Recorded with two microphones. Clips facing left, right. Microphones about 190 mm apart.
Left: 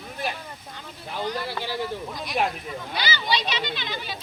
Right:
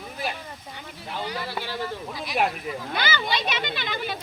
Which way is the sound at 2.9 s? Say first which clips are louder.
Left 1 dB; 50° right (ahead or behind).